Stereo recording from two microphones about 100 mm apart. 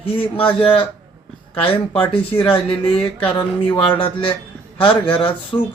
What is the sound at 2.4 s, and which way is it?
Speech, 65° left (ahead or behind).